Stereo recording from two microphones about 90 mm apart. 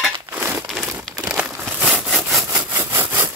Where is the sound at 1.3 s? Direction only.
15° right (ahead or behind).